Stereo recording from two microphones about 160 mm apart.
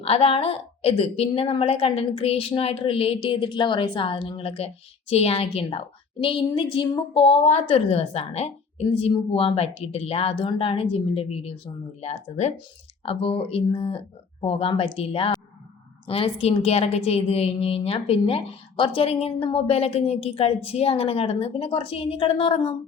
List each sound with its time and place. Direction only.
0.0 s a woman's voice: 40° left (ahead or behind)